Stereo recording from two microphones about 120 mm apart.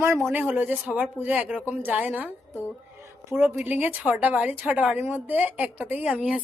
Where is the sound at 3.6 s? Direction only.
15° right (ahead or behind).